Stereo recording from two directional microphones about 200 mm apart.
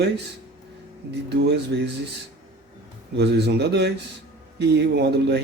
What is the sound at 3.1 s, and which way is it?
Speech, 55° right (ahead or behind).